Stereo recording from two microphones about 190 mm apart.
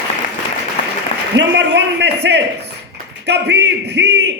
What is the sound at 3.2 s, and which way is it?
A man's voice, 60° right (ahead or behind).